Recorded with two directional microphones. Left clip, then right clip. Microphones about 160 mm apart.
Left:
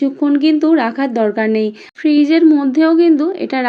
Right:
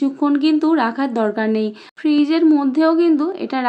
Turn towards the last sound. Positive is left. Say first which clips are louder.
# left 4 dB
turn(degrees=15)  # may be behind; listen again after turning